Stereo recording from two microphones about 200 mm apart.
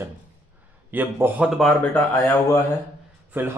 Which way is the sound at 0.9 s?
10° right (ahead or behind).